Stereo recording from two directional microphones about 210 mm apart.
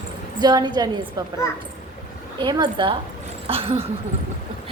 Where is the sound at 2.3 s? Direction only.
20° right (ahead or behind).